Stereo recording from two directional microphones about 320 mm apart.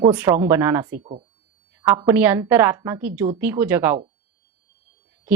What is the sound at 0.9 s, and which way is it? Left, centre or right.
Speech, centre.